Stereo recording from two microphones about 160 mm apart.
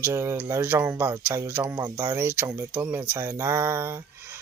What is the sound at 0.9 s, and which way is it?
Mantra, 20° right (ahead or behind).